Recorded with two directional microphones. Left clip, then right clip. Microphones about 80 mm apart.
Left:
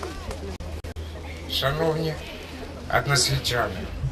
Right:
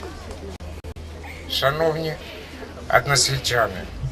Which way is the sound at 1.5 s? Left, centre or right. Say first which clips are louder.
Right 4 dB; right.